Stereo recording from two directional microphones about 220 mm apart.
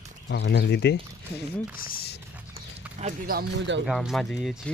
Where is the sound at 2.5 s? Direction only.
40° right (ahead or behind).